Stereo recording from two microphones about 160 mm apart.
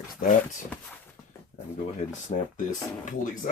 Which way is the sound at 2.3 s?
45° left (ahead or behind).